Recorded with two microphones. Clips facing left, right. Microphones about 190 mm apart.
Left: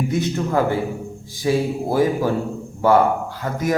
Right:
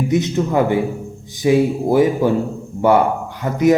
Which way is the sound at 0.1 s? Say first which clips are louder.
Right 4 dB; 20° right (ahead or behind).